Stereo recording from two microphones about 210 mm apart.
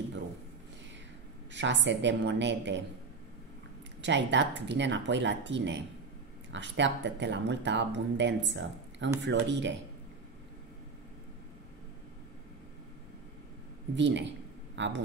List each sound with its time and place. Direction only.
1.5 s speech: 60° right (ahead or behind)
4.0 s speech: 60° right (ahead or behind)
13.9 s speech: 60° right (ahead or behind)